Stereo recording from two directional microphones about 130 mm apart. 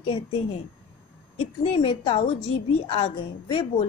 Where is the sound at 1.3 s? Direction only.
50° left (ahead or behind).